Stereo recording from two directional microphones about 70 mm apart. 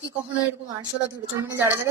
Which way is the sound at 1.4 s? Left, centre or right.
Right.